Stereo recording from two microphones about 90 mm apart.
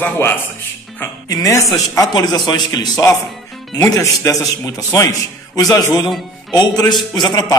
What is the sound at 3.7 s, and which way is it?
A man's voice, 40° left (ahead or behind).